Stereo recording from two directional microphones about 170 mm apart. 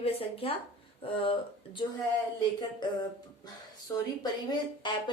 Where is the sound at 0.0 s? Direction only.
35° left (ahead or behind).